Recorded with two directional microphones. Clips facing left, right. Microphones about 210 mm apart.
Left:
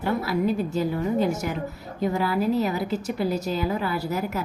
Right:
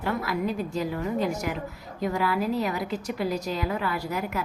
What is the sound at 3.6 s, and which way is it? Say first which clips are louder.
Speech: left 2 dB; 30° left (ahead or behind).